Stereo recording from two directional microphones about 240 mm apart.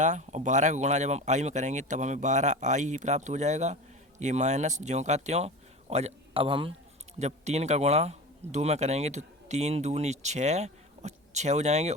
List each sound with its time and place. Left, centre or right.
0.0 s a man's voice: right